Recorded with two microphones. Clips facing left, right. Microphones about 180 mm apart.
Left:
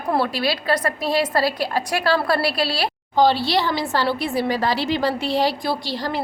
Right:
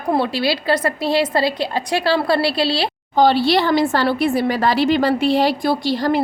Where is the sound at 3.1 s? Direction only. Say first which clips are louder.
Right 3 dB; 55° right (ahead or behind).